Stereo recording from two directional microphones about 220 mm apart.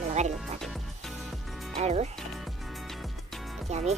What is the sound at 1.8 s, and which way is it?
Speech, 30° right (ahead or behind).